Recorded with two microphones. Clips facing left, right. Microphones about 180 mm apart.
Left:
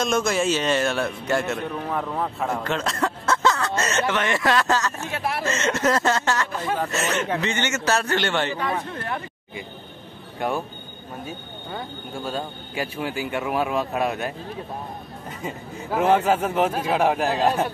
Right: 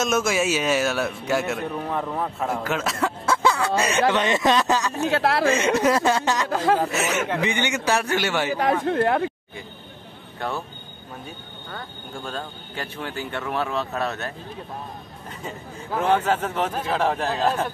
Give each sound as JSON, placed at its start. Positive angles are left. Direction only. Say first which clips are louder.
{"t": 0.0, "sound": "a man's voice", "louder": "even", "side_deg": -5}
{"t": 5.0, "sound": "speech", "louder": "right 7 dB", "side_deg": -85}
{"t": 5.5, "sound": "a man's voice", "louder": "even", "side_deg": -15}
{"t": 6.5, "sound": "speech", "louder": "right 6 dB", "side_deg": -90}
{"t": 6.8, "sound": "a man's voice", "louder": "right 1 dB", "side_deg": -5}
{"t": 8.8, "sound": "speech", "louder": "right 10 dB", "side_deg": -60}
{"t": 10.4, "sound": "a man's voice", "louder": "left 3 dB", "side_deg": 15}
{"t": 12.3, "sound": "a man's voice", "louder": "left 4 dB", "side_deg": 10}
{"t": 15.4, "sound": "a man's voice", "louder": "left 3 dB", "side_deg": 10}